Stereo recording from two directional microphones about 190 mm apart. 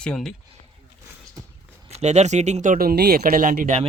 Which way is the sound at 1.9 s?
35° right (ahead or behind).